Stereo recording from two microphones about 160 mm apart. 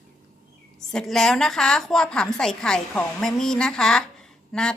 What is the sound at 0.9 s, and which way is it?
A woman's voice, 5° left (ahead or behind).